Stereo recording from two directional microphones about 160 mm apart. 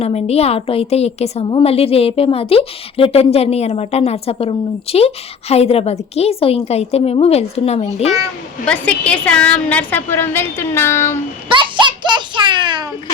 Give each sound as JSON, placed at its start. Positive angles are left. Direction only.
{"t": 0.0, "sound": "a woman's voice", "side_deg": 40}
{"t": 8.6, "sound": "a woman's voice", "side_deg": 5}
{"t": 11.4, "sound": "a sound", "side_deg": -30}